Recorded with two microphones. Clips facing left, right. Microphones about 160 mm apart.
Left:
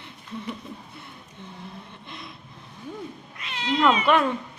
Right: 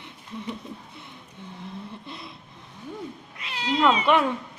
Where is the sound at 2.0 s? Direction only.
35° right (ahead or behind).